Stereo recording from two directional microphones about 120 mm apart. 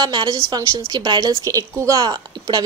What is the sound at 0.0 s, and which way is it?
A woman's voice, 40° right (ahead or behind).